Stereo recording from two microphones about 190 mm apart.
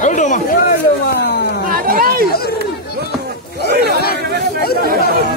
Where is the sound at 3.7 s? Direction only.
55° right (ahead or behind).